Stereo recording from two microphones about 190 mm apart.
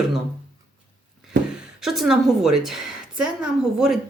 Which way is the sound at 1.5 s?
Centre (ahead or behind).